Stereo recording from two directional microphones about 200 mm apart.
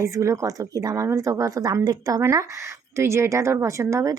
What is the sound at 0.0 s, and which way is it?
Speech, 15° right (ahead or behind).